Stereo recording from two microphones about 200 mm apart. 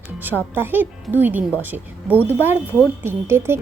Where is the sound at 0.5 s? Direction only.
10° right (ahead or behind).